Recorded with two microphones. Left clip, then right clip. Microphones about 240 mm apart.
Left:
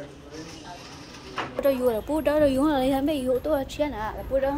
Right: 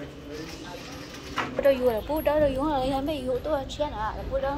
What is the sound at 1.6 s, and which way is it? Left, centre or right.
A woman's voice, left.